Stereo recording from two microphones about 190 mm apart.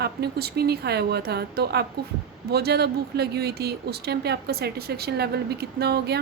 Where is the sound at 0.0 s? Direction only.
55° right (ahead or behind).